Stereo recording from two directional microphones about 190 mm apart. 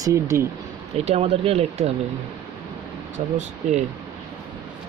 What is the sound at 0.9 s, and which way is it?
Speech, 35° right (ahead or behind).